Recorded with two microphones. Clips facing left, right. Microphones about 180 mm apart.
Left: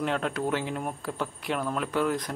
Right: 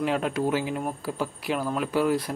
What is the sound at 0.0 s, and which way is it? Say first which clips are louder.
Speech: right 3 dB; 10° right (ahead or behind).